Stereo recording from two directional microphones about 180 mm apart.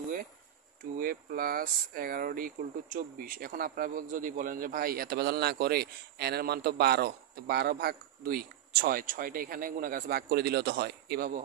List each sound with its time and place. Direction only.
0.9 s speech: 55° right (ahead or behind)